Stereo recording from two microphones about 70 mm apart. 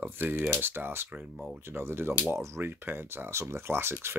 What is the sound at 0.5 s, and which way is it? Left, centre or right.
Speech, right.